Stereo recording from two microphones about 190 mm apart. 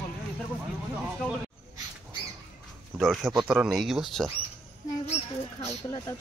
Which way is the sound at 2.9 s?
Centre (ahead or behind).